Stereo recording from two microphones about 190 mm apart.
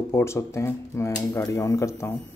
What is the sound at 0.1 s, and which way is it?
Speech, 15° left (ahead or behind).